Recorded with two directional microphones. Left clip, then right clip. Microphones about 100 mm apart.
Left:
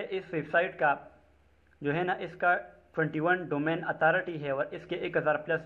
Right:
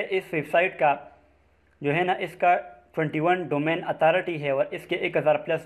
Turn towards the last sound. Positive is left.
turn(degrees=-40)  # may be behind; listen again after turning